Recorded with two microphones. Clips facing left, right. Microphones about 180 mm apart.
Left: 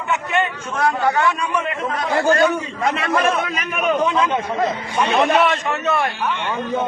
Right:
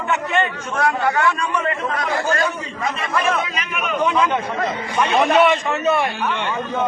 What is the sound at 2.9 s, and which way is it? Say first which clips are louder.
Speech: left 1 dB; 60° left (ahead or behind).